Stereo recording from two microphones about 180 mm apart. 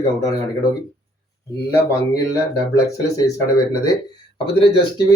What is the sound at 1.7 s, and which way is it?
Speech, 15° left (ahead or behind).